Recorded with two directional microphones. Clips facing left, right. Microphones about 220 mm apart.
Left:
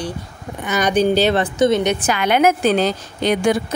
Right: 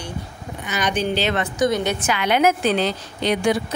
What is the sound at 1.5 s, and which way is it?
Speech, 25° left (ahead or behind).